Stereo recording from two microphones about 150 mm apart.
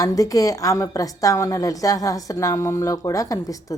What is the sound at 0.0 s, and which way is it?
Speech, 25° left (ahead or behind).